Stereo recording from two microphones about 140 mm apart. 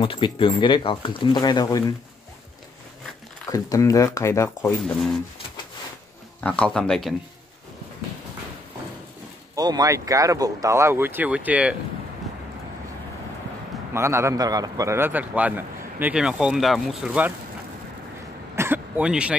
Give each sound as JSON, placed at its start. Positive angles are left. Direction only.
{"t": 0.0, "sound": "speech", "side_deg": 40}
{"t": 3.4, "sound": "speech", "side_deg": 25}
{"t": 6.4, "sound": "speech", "side_deg": 10}
{"t": 9.6, "sound": "speech", "side_deg": -30}
{"t": 13.9, "sound": "a man's voice", "side_deg": -20}
{"t": 18.6, "sound": "throat clearing", "side_deg": -10}